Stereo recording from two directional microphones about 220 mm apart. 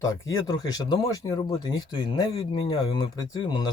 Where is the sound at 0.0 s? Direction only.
15° left (ahead or behind).